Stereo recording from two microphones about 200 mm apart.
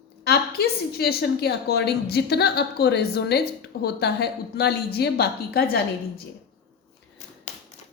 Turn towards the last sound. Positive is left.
turn(degrees=50)  # may be behind; listen again after turning